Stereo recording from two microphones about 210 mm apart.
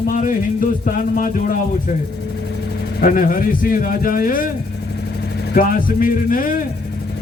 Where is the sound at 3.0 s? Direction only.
40° left (ahead or behind).